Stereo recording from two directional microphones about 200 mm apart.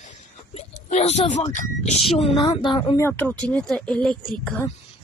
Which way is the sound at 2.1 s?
30° left (ahead or behind).